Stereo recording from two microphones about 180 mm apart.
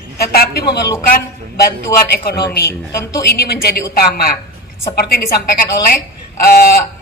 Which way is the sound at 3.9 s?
60° left (ahead or behind).